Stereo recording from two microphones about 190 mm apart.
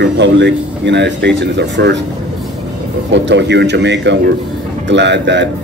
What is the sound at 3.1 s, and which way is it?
A man's voice, 65° right (ahead or behind).